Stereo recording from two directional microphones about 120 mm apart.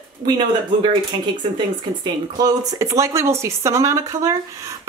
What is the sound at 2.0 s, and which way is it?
Speech, 30° right (ahead or behind).